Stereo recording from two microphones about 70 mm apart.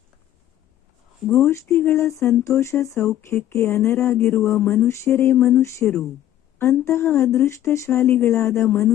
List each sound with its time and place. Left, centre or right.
1.5 s speech: left
2.0 s a sound: left
2.4 s speech: left
5.8 s speech: centre
6.6 s speech: left